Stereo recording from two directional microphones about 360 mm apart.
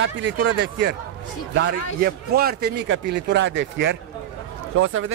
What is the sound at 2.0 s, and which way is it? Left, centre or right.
Speech, right.